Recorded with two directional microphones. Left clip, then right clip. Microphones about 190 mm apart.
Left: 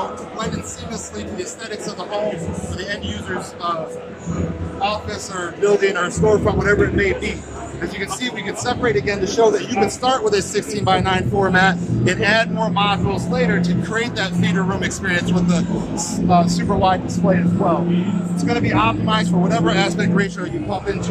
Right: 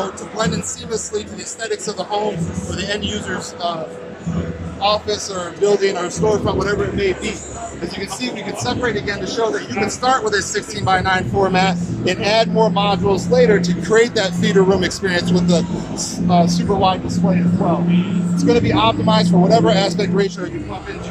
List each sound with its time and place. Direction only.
4.8 s a man's voice: 20° right (ahead or behind)
8.2 s a man's voice: 5° left (ahead or behind)
11.3 s speech: 5° right (ahead or behind); by 20.2 s 25° right (ahead or behind)